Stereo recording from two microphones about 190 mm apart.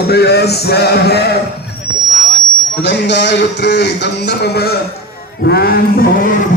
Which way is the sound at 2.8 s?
70° left (ahead or behind).